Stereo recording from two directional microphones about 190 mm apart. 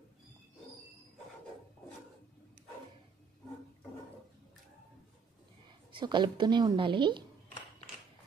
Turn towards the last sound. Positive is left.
turn(degrees=-25)  # may be behind; listen again after turning